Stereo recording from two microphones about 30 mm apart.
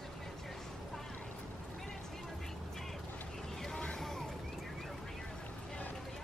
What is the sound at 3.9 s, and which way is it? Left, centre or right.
Vehicle, centre.